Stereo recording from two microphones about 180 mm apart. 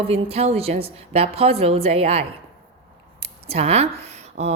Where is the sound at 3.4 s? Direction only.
35° right (ahead or behind).